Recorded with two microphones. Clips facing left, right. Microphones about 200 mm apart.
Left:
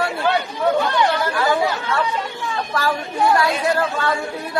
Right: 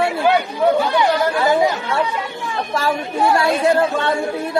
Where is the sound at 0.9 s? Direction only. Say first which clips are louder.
Right 3 dB; 15° right (ahead or behind).